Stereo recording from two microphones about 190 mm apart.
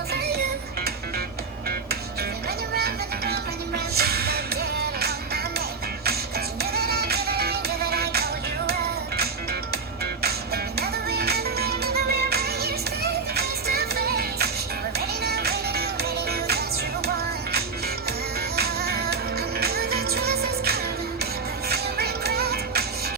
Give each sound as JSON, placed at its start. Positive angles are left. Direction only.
{"t": 2.7, "sound": "music", "side_deg": -55}
{"t": 10.2, "sound": "music", "side_deg": -55}
{"t": 18.5, "sound": "music", "side_deg": -55}